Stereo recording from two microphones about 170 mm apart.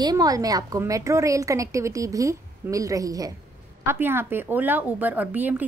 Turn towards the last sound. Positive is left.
turn(degrees=-10)  # may be behind; listen again after turning